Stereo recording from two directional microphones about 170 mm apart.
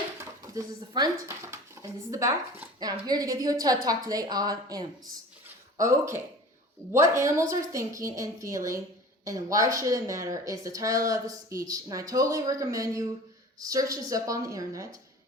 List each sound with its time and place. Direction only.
0.2 s a woman's voice: 20° right (ahead or behind)